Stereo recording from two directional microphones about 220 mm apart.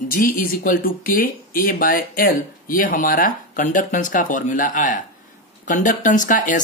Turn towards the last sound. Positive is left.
turn(degrees=35)  # may be behind; listen again after turning